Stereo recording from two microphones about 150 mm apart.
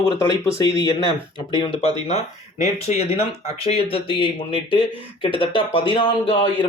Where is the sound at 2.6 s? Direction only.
45° left (ahead or behind).